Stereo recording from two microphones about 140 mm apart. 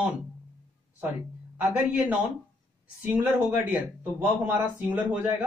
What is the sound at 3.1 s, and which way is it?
Speech, 10° right (ahead or behind).